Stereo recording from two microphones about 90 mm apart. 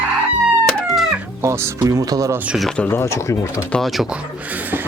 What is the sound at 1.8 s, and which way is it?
Speech, 40° right (ahead or behind).